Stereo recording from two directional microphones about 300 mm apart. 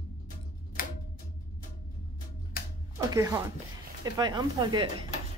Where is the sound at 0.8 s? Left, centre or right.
Left.